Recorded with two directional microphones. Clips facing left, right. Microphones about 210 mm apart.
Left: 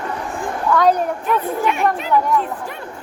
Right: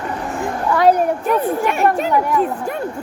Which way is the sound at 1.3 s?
45° right (ahead or behind).